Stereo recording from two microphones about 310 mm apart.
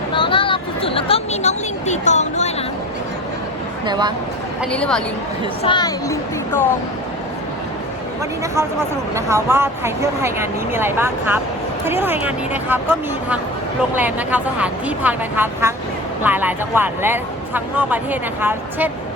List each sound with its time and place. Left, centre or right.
0.1 s a sound: centre
3.8 s speech: centre
4.6 s speech: centre
5.6 s speech: centre
8.5 s speech: centre
13.9 s speech: centre